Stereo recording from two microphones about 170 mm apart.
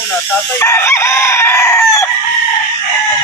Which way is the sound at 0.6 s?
15° left (ahead or behind).